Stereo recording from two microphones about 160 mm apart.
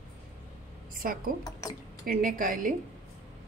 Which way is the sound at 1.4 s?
25° left (ahead or behind).